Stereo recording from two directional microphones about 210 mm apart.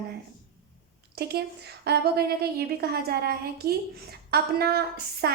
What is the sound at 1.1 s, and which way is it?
A woman's voice, 50° right (ahead or behind).